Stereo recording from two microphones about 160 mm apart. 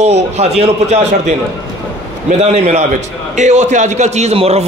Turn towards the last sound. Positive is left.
turn(degrees=-40)  # may be behind; listen again after turning